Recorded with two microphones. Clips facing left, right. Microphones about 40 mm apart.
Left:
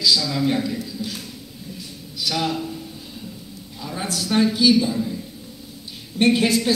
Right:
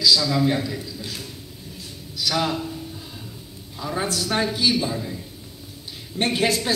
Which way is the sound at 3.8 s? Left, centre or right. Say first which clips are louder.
Right 2 dB; right.